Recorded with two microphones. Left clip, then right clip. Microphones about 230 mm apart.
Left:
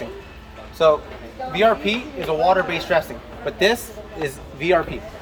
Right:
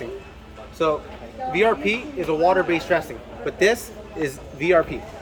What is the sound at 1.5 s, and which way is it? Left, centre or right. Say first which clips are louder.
Speech: left 2 dB; centre.